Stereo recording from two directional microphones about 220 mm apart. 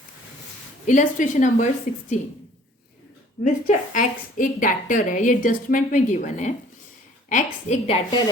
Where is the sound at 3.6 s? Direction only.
35° left (ahead or behind).